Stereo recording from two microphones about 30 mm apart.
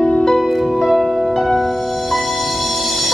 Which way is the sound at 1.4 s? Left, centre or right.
Centre.